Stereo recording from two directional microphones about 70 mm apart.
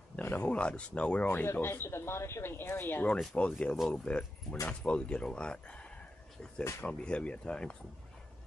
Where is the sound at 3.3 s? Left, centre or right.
Centre.